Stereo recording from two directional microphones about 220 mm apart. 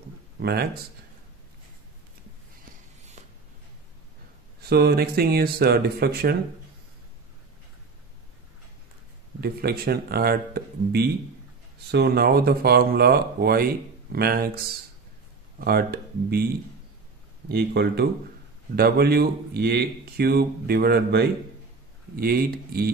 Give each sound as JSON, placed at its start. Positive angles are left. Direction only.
{"t": 0.4, "sound": "speech", "side_deg": -45}
{"t": 4.6, "sound": "speech", "side_deg": -45}
{"t": 9.4, "sound": "speech", "side_deg": -45}
{"t": 17.5, "sound": "speech", "side_deg": -45}